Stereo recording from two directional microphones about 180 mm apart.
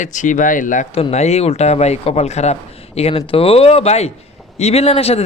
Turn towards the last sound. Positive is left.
turn(degrees=35)  # may be behind; listen again after turning